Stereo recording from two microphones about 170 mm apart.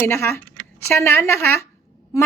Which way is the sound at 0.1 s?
15° left (ahead or behind).